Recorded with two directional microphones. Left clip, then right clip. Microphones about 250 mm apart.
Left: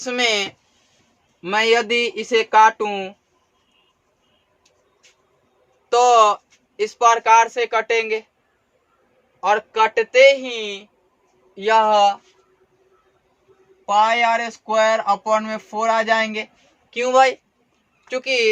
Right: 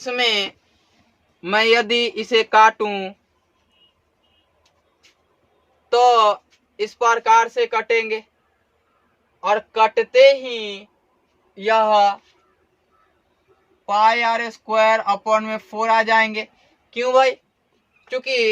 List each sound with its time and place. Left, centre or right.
0.0 s speech: centre
1.4 s speech: centre
5.9 s speech: centre
9.4 s speech: centre
13.8 s speech: centre